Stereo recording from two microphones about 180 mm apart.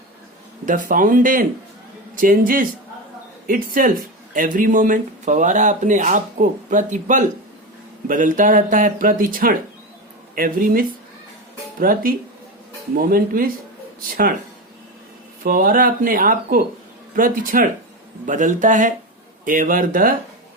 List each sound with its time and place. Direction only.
0.6 s speech: 45° right (ahead or behind)
15.4 s speech: 50° right (ahead or behind)